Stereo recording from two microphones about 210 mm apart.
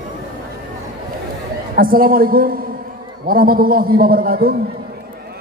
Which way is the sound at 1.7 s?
45° right (ahead or behind).